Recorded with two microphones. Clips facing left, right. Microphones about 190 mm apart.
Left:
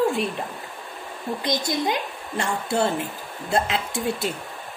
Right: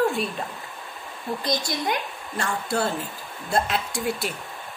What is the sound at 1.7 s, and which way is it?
A woman's voice, 20° left (ahead or behind).